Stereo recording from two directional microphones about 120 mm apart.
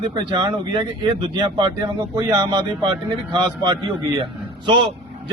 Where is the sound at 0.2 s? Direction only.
40° right (ahead or behind).